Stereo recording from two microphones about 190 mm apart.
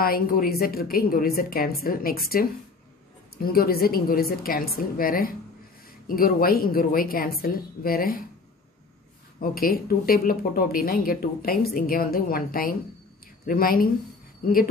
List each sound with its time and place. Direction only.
0.0 s speech: 50° left (ahead or behind)
9.4 s speech: 50° left (ahead or behind)